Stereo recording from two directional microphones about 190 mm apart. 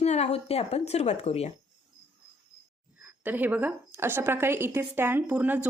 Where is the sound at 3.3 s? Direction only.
10° right (ahead or behind).